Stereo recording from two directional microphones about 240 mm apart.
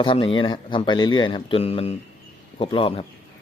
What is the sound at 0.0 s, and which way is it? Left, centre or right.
Speech, left.